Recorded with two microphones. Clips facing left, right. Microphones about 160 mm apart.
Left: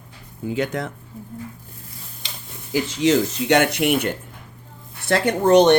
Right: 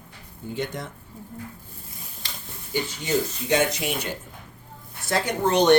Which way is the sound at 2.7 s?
90° left.